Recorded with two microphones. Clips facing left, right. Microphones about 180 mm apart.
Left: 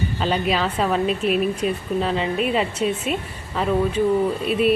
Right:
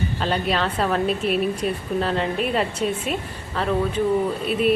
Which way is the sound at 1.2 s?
35° right (ahead or behind).